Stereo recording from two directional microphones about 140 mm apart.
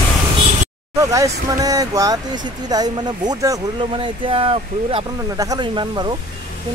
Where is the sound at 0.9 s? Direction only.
25° right (ahead or behind).